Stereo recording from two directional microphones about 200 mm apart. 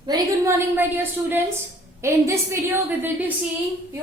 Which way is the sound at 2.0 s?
15° right (ahead or behind).